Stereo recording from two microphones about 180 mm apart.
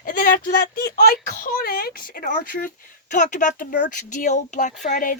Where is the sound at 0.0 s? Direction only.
50° left (ahead or behind).